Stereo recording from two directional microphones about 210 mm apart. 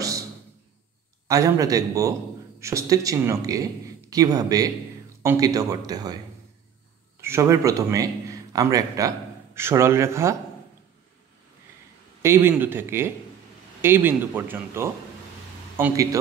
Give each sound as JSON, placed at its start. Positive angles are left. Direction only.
{"t": 1.2, "sound": "speech", "side_deg": -15}
{"t": 7.2, "sound": "a man's voice", "side_deg": -10}
{"t": 12.2, "sound": "speech", "side_deg": -10}